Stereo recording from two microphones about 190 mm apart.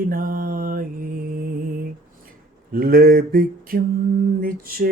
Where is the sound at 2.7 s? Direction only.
50° right (ahead or behind).